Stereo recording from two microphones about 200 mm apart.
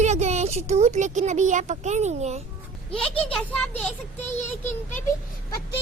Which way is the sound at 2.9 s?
5° left (ahead or behind).